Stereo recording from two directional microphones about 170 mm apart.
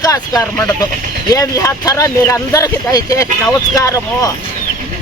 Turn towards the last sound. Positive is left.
turn(degrees=20)  # may be behind; listen again after turning